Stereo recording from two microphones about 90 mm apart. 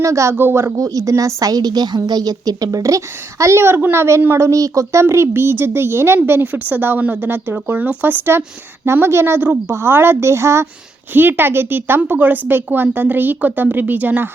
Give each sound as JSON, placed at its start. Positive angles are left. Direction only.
{"t": 0.0, "sound": "a woman's voice", "side_deg": -35}